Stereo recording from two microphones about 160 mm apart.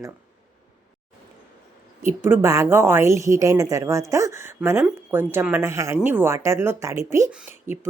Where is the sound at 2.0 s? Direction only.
15° right (ahead or behind).